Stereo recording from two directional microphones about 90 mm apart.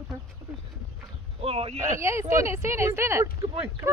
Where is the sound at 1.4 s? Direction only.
90° right.